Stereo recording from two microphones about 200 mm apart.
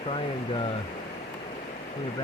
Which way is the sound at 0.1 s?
25° left (ahead or behind).